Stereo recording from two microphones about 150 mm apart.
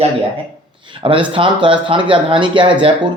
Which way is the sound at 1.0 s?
35° right (ahead or behind).